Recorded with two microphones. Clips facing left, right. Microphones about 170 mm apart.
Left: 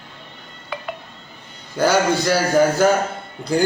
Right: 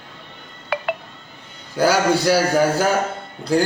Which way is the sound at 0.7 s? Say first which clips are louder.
Right 6 dB; 70° right (ahead or behind).